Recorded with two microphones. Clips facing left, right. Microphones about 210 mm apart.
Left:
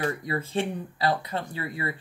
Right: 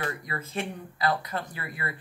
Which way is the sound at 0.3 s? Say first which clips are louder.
Left 5 dB; 30° left (ahead or behind).